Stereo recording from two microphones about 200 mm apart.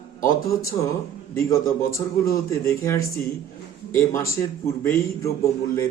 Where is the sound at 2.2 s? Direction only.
15° left (ahead or behind).